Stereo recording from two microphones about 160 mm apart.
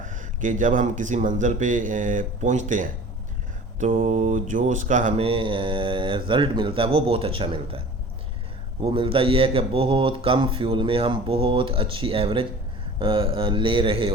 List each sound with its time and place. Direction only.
0.0 s speech: 55° right (ahead or behind)
3.9 s speech: 45° right (ahead or behind)
5.2 s speech: 35° right (ahead or behind)
8.8 s speech: 35° right (ahead or behind)